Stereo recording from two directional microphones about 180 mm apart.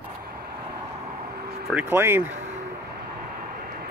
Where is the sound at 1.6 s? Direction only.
10° right (ahead or behind).